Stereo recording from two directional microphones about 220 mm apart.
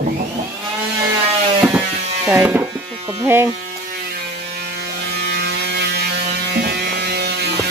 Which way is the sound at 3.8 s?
45° right (ahead or behind).